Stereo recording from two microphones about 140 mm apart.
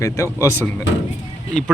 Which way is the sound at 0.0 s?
20° left (ahead or behind).